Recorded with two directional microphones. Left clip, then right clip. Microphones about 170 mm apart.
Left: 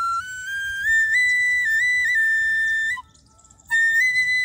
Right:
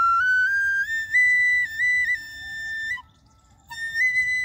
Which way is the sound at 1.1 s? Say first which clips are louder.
Even; 15° right (ahead or behind).